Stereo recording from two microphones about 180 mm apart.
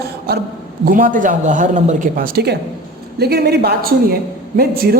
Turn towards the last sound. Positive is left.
turn(degrees=-55)  # may be behind; listen again after turning